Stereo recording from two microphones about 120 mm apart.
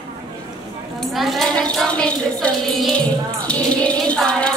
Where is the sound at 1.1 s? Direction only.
Centre (ahead or behind).